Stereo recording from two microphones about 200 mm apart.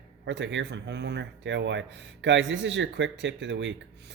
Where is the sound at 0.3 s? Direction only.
65° right (ahead or behind).